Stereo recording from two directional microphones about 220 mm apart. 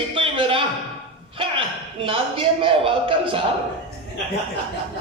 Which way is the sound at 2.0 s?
25° right (ahead or behind).